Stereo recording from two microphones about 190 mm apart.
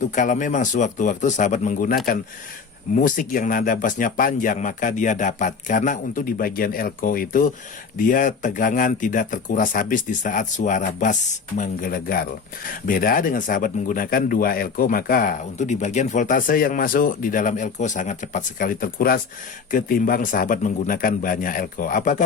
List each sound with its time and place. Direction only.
0.0 s speech: 40° left (ahead or behind)